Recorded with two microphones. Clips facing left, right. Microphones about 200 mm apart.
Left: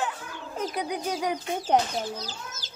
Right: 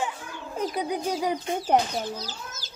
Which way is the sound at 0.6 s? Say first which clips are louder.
Right 2 dB; centre (ahead or behind).